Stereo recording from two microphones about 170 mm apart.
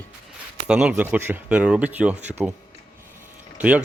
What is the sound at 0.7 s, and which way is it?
Speech, 5° right (ahead or behind).